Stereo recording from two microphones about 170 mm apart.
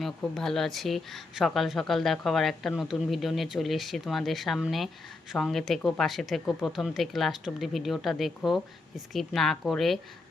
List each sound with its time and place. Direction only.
0.0 s speech: 5° left (ahead or behind)